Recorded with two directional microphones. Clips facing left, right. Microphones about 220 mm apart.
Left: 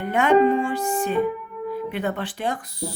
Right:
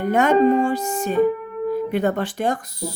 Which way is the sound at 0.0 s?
40° right (ahead or behind).